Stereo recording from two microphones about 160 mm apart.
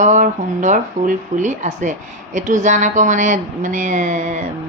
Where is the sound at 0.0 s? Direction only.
50° right (ahead or behind).